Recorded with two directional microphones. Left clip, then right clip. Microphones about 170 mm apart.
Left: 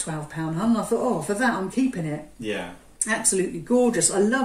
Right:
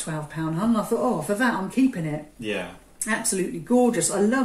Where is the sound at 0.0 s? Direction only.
20° left (ahead or behind).